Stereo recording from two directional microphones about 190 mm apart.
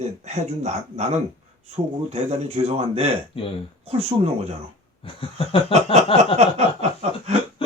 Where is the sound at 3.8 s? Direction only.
30° right (ahead or behind).